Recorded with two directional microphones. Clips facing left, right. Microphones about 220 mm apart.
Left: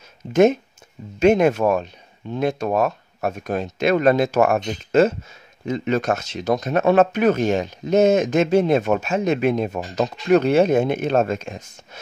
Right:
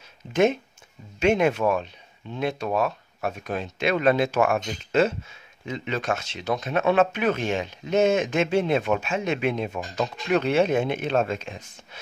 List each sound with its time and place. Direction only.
0.3 s speech: 45° left (ahead or behind)